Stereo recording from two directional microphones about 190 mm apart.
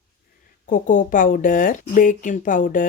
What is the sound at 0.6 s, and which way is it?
Speech, 45° left (ahead or behind).